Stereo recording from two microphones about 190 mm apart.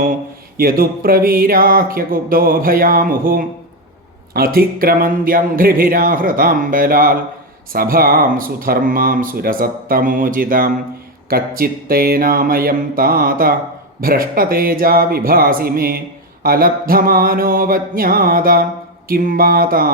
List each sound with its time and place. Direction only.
0.5 s speech: 50° right (ahead or behind)